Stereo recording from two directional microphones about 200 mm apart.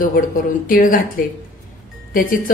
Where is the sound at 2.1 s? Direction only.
45° left (ahead or behind).